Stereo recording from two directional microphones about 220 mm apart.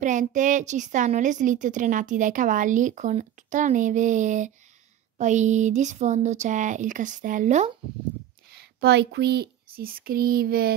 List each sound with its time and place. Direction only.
0.0 s a woman's voice: 35° right (ahead or behind)
8.5 s speech: 45° right (ahead or behind)